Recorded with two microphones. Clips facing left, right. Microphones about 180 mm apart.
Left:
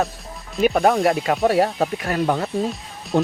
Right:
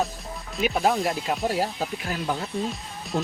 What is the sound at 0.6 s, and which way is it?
Speech, 60° left (ahead or behind).